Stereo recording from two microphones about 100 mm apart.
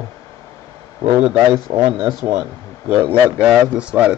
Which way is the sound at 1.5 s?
55° right (ahead or behind).